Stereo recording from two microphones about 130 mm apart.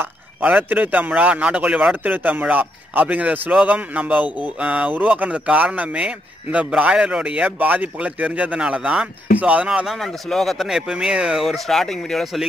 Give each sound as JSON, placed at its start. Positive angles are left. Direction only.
{"t": 0.0, "sound": "a man's voice", "side_deg": -15}